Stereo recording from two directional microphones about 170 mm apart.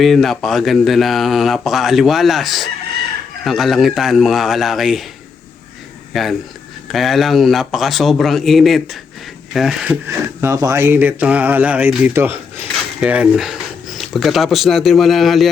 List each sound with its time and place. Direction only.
0.0 s a man's voice: centre (ahead or behind)
6.1 s a man's voice: centre (ahead or behind)
10.1 s speech: 15° right (ahead or behind); by 15.4 s centre (ahead or behind)